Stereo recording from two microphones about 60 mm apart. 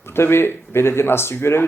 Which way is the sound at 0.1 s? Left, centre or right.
Left.